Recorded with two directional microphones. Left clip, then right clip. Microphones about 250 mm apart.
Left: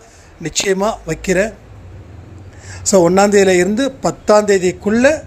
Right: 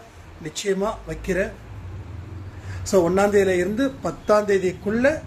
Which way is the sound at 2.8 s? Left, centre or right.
Left.